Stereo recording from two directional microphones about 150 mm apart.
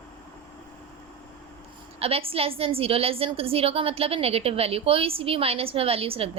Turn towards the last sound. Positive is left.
turn(degrees=-40)  # may be behind; listen again after turning